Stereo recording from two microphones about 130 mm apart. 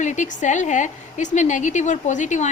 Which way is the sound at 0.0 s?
70° left (ahead or behind).